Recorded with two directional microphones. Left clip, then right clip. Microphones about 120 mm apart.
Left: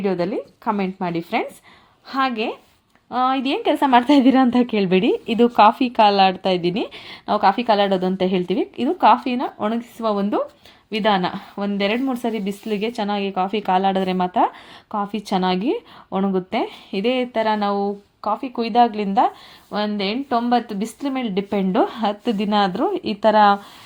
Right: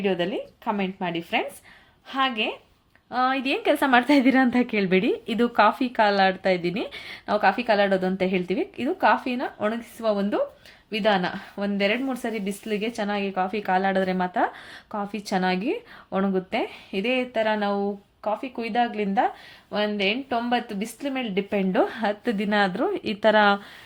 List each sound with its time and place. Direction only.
0.0 s speech: 35° left (ahead or behind)
2.0 s a woman's voice: 55° left (ahead or behind)
3.1 s a woman's voice: 35° left (ahead or behind)
16.5 s speech: 45° left (ahead or behind); by 23.1 s 20° left (ahead or behind)
23.2 s speech: 5° left (ahead or behind)